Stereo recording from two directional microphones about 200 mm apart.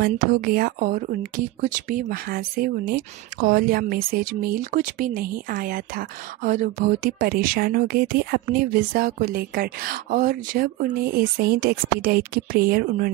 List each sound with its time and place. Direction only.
0.0 s speech: 45° right (ahead or behind)